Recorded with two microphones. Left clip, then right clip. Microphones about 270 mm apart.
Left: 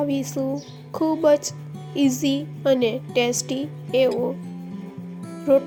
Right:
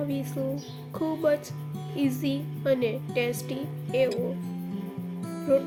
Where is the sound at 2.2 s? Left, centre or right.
Left.